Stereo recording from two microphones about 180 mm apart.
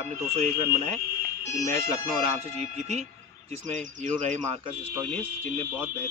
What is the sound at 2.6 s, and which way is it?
Speech, 40° right (ahead or behind).